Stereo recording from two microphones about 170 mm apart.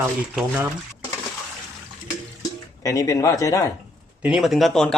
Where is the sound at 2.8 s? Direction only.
20° left (ahead or behind).